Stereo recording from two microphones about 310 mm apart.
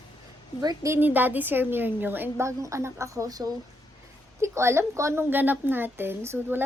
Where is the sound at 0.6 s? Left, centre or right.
Centre.